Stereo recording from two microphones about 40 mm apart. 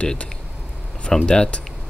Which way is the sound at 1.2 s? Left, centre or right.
Left.